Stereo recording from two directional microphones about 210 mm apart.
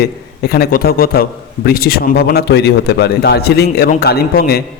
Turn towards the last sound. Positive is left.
turn(degrees=45)  # may be behind; listen again after turning